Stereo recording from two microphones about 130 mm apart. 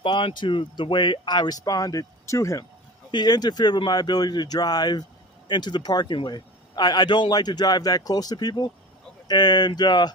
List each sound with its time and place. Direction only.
0.0 s a man's voice: 40° left (ahead or behind)